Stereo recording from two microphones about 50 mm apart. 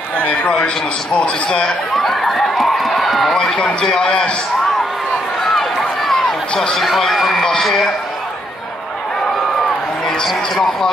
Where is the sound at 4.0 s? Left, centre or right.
Left.